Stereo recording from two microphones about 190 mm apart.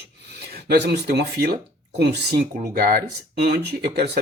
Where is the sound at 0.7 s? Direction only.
60° right (ahead or behind).